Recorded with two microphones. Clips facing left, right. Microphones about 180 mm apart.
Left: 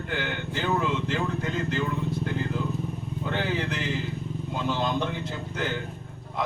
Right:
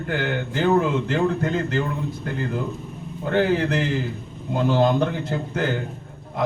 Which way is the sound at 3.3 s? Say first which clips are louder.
Right 9 dB; 55° right (ahead or behind).